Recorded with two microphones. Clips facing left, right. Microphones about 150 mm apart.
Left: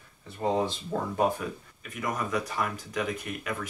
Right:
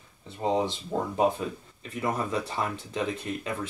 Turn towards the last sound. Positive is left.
turn(degrees=-25)  # may be behind; listen again after turning